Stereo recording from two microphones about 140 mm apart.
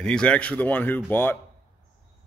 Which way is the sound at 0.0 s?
5° left (ahead or behind).